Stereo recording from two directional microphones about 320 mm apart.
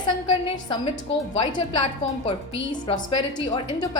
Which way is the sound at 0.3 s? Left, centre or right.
Centre.